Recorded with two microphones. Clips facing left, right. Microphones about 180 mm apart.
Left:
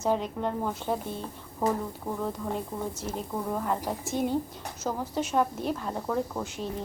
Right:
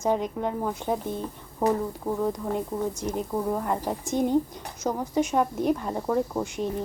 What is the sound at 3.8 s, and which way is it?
Speech, 15° right (ahead or behind).